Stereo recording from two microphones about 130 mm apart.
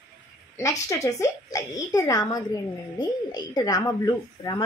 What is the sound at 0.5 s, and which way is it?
A woman's voice, 25° left (ahead or behind).